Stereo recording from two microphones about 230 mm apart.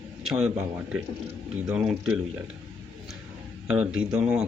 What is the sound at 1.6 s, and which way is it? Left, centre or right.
Speech, centre.